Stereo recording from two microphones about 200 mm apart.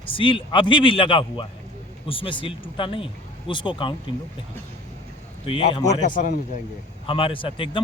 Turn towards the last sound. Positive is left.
turn(degrees=25)  # may be behind; listen again after turning